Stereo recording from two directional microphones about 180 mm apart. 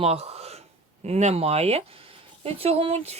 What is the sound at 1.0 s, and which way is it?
Speech, 35° right (ahead or behind).